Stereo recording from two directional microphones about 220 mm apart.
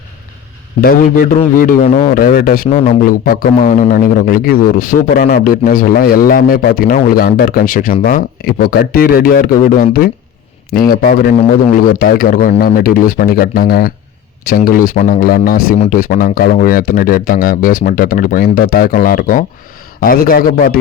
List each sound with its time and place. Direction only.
0.8 s a man's voice: 40° left (ahead or behind)